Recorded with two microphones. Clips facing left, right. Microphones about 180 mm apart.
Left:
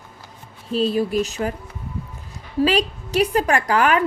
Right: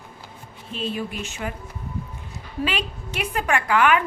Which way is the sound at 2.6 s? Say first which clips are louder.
Left 8 dB; 35° left (ahead or behind).